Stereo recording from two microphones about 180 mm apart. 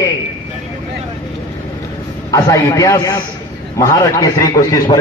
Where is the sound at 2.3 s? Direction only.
20° left (ahead or behind).